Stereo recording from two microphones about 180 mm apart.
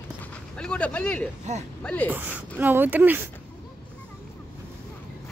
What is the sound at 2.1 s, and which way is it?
Speech, 10° right (ahead or behind).